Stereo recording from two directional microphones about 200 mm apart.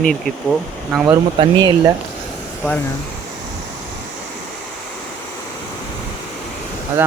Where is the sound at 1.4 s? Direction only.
20° right (ahead or behind).